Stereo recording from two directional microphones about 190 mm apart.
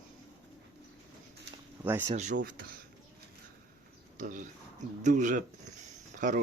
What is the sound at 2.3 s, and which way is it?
Speech, 55° right (ahead or behind).